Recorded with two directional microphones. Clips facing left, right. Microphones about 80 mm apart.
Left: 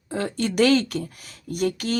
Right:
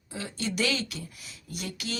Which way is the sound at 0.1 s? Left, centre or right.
Left.